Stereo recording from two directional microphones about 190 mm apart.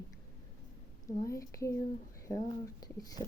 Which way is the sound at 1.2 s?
15° left (ahead or behind).